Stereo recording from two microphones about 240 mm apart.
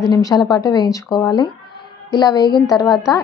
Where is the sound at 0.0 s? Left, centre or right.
Centre.